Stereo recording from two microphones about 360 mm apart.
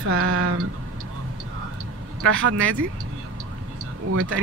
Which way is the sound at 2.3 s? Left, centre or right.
Right.